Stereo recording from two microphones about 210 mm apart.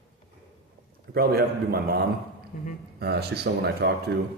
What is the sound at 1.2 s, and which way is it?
A man's voice, 45° right (ahead or behind).